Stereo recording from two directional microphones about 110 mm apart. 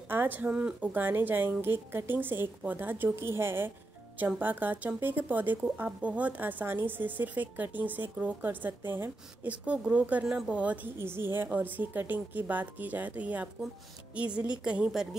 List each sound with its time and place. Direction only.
0.1 s speech: 15° right (ahead or behind)